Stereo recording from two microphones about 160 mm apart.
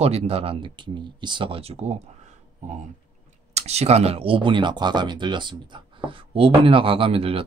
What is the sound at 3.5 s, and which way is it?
Speech, 40° right (ahead or behind).